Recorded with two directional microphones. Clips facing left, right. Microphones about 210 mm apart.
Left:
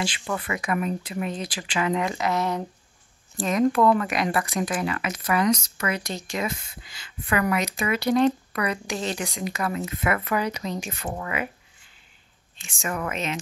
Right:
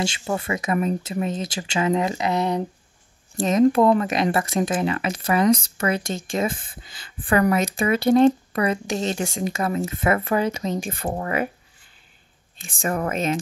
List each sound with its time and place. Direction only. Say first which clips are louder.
0.0 s speech: right 4 dB; 25° right (ahead or behind)
6.0 s speech: right 4 dB; 50° right (ahead or behind)
6.3 s speech: right 5 dB; 30° right (ahead or behind)
11.1 s speech: right 5 dB; 40° right (ahead or behind)
12.8 s speech: right 5 dB; 35° right (ahead or behind)
13.1 s speech: right 6 dB; 50° right (ahead or behind)